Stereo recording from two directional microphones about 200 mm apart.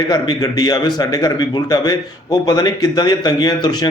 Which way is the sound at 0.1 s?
20° left (ahead or behind).